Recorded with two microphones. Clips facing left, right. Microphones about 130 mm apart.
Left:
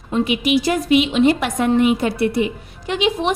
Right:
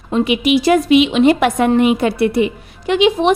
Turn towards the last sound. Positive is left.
turn(degrees=-75)  # may be behind; listen again after turning